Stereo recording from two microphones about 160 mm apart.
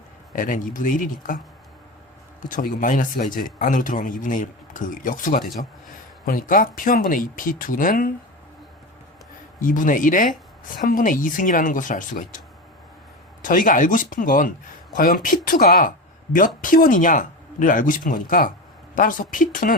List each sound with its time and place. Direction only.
0.3 s a man's voice: 55° left (ahead or behind)
2.5 s a man's voice: 55° left (ahead or behind)
9.6 s a man's voice: 55° left (ahead or behind)
13.4 s a man's voice: 55° left (ahead or behind)